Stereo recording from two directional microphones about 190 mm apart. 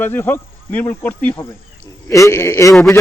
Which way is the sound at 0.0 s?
10° left (ahead or behind).